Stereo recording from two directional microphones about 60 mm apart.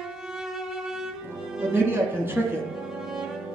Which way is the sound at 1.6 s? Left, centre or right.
Right.